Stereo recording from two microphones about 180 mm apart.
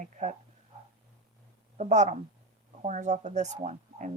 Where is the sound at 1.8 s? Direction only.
40° right (ahead or behind).